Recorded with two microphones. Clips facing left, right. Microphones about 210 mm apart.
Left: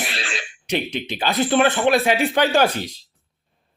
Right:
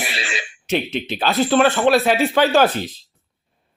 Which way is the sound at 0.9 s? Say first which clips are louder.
Right 2 dB; 15° left (ahead or behind).